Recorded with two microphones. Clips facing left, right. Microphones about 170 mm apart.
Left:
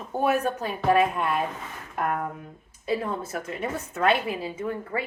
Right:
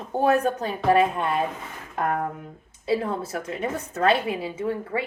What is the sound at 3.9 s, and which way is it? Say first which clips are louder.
Speech: right 2 dB; 35° right (ahead or behind).